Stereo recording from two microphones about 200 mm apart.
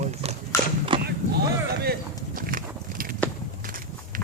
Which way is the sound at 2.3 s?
45° right (ahead or behind).